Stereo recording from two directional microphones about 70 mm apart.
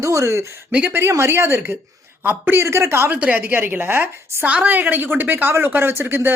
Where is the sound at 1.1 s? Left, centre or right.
Right.